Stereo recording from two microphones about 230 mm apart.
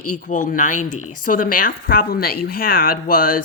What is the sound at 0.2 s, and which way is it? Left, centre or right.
Speech, left.